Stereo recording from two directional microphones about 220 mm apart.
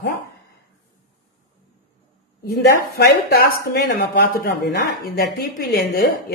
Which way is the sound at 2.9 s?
45° left (ahead or behind).